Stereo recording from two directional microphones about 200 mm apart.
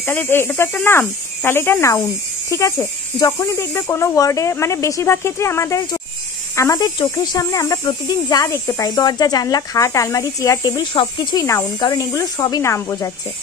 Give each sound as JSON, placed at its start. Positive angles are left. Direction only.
{"t": 0.0, "sound": "speech", "side_deg": 10}